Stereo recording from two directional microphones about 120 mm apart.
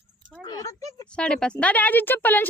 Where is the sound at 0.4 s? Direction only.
25° left (ahead or behind).